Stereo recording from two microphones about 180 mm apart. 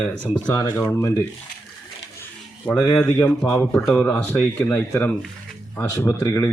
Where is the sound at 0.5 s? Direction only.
20° left (ahead or behind).